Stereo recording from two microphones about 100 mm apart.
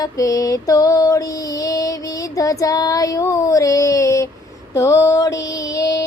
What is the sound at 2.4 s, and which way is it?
Child singing, 35° left (ahead or behind).